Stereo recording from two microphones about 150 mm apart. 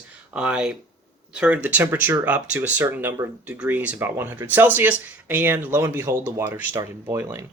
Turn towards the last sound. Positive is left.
turn(degrees=-15)  # may be behind; listen again after turning